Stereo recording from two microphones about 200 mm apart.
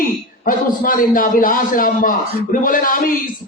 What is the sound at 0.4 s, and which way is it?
Speech, 45° left (ahead or behind).